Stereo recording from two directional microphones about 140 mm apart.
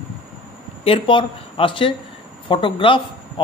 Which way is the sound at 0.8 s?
40° left (ahead or behind).